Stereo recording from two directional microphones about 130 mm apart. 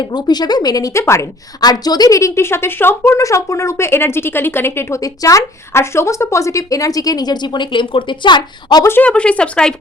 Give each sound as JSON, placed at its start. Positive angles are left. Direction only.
{"t": 0.0, "sound": "a woman's voice", "side_deg": 30}
{"t": 8.9, "sound": "speech", "side_deg": 10}